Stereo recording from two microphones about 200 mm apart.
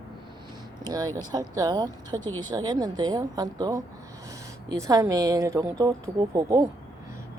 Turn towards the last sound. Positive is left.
turn(degrees=-20)  # may be behind; listen again after turning